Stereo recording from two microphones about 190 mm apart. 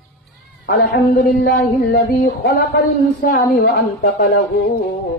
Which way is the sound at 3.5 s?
65° left (ahead or behind).